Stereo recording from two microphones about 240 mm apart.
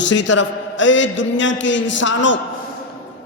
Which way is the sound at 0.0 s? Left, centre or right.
Left.